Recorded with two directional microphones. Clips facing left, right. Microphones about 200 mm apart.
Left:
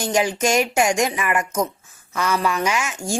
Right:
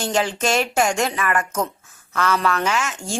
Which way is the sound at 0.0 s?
10° left (ahead or behind).